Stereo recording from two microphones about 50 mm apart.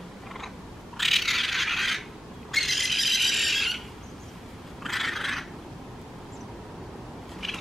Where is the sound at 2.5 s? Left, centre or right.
Centre.